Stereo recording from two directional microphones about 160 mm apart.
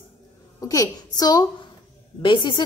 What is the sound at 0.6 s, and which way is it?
A woman's voice, 20° left (ahead or behind).